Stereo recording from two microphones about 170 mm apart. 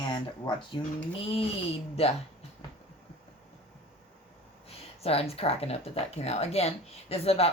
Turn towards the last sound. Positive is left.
turn(degrees=35)  # may be behind; listen again after turning